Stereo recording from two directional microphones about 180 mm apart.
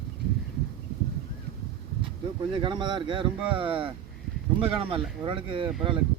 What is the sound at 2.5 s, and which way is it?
Speech, 25° right (ahead or behind).